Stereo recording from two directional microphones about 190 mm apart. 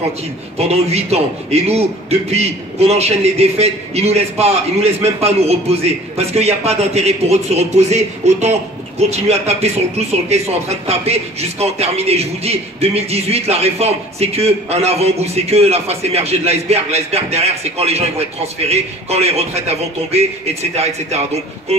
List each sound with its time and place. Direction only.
0.6 s a man's voice: 35° right (ahead or behind)